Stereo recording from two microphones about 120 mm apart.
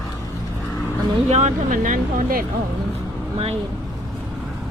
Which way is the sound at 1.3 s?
75° right (ahead or behind).